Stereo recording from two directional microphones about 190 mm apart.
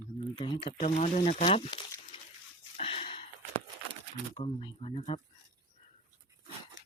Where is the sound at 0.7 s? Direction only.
35° left (ahead or behind).